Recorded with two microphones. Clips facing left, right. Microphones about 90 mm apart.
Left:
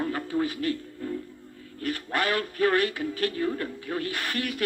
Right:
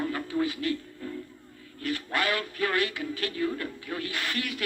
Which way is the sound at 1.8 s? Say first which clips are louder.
Left 1 dB; 40° left (ahead or behind).